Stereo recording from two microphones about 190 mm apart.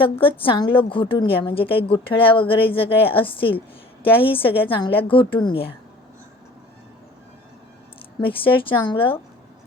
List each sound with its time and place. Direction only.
0.0 s a woman's voice: 30° left (ahead or behind)
8.2 s a woman's voice: 30° left (ahead or behind)